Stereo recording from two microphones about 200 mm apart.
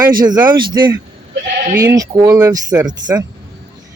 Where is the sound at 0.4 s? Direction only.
20° right (ahead or behind).